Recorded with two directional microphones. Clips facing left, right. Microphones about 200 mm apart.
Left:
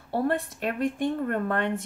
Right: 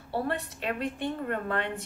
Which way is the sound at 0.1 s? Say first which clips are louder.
Left 5 dB; 50° left (ahead or behind).